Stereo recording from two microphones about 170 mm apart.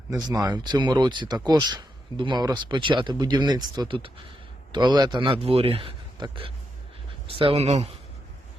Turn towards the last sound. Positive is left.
turn(degrees=-40)  # may be behind; listen again after turning